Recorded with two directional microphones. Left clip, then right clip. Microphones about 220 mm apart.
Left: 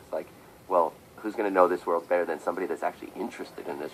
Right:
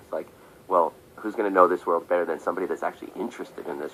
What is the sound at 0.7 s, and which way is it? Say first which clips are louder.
A man's voice: right 2 dB; 25° right (ahead or behind).